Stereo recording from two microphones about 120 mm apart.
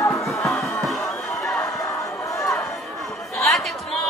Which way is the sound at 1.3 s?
5° left (ahead or behind).